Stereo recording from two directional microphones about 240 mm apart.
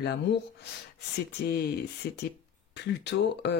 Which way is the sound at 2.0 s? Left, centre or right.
Left.